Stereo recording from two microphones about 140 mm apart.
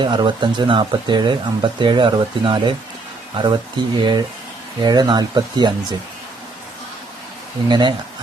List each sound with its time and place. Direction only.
0.0 s speech: 35° right (ahead or behind)
7.7 s speech: 35° right (ahead or behind)